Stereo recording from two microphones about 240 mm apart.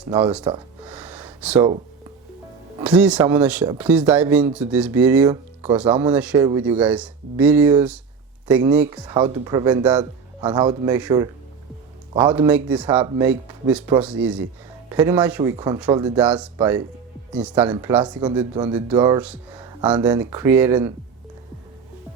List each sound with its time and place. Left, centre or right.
0.5 s speech: centre
0.9 s gasp: centre
2.8 s speech: centre
16.1 s speech: centre
17.9 s speech: centre
19.5 s music: centre
20.0 s speech: centre